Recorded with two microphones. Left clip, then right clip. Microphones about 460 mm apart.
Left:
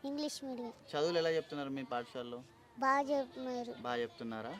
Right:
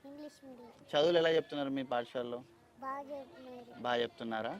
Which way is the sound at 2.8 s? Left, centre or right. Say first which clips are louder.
Left 10 dB; left.